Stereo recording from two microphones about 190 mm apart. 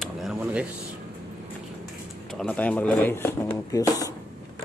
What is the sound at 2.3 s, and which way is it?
Speech, 5° left (ahead or behind).